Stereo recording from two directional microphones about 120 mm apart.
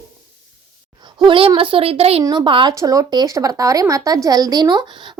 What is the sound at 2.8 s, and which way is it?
A woman's voice, 30° right (ahead or behind).